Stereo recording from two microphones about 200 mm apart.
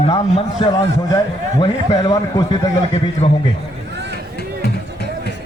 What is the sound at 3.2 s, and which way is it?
Speech, 30° left (ahead or behind).